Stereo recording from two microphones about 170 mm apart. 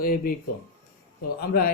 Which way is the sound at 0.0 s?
60° left (ahead or behind).